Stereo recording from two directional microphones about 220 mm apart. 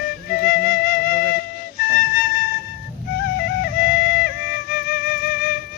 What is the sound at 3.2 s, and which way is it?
Music, 45° left (ahead or behind).